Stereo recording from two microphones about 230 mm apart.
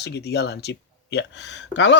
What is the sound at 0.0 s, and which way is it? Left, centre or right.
Speech, left.